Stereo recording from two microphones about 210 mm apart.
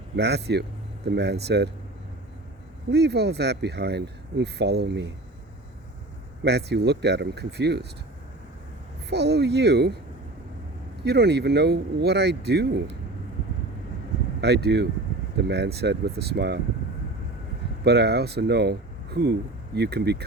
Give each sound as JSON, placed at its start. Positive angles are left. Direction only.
{"t": 0.2, "sound": "speech", "side_deg": -50}
{"t": 2.9, "sound": "speech", "side_deg": -50}
{"t": 6.4, "sound": "speech", "side_deg": -50}
{"t": 9.0, "sound": "speech", "side_deg": -55}
{"t": 11.0, "sound": "speech", "side_deg": -50}
{"t": 14.4, "sound": "speech", "side_deg": -50}
{"t": 17.8, "sound": "speech", "side_deg": -50}